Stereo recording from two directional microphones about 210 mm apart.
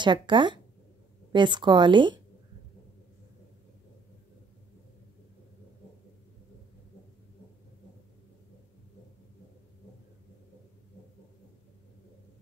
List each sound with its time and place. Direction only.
0.0 s a woman's voice: 20° right (ahead or behind)